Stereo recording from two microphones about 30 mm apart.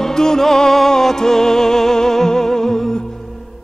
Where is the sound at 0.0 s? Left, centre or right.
Centre.